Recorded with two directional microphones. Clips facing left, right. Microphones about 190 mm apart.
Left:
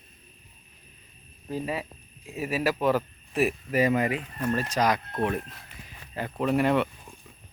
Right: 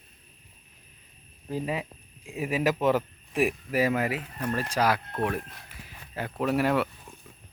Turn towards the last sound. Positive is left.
turn(degrees=-5)  # may be behind; listen again after turning